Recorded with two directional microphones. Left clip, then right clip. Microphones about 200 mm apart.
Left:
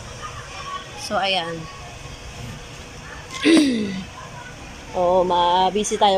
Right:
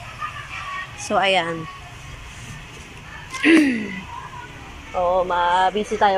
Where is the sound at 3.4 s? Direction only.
20° left (ahead or behind).